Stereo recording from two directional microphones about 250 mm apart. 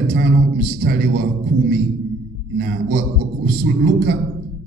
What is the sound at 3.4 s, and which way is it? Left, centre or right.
Speech, right.